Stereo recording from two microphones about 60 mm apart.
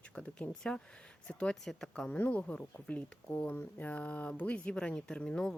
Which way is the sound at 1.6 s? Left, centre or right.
Centre.